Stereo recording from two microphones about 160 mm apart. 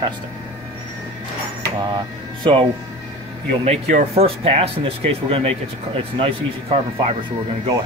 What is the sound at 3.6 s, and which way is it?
Speech, 40° right (ahead or behind).